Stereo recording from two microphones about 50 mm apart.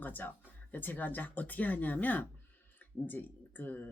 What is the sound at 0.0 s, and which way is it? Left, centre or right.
Speech, left.